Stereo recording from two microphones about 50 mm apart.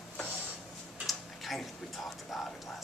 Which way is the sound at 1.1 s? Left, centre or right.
Centre.